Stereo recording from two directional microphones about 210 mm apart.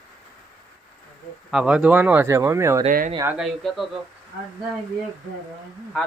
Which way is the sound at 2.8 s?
40° right (ahead or behind).